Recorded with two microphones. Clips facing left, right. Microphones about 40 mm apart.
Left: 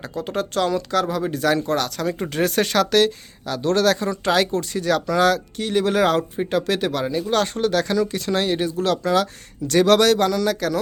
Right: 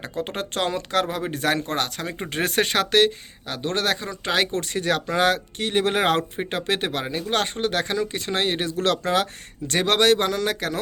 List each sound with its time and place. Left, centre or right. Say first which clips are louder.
0.2 s speech: left 4 dB; right
4.5 s speech: left 3 dB; right
9.8 s speech: left 2 dB; right